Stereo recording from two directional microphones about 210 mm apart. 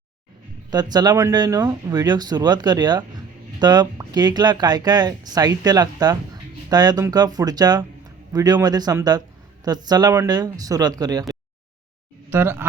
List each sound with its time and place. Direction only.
0.7 s speech: 20° right (ahead or behind)
12.3 s speech: 10° right (ahead or behind)